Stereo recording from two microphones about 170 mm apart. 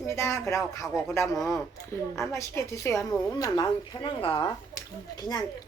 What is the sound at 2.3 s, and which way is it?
Speech, 15° left (ahead or behind).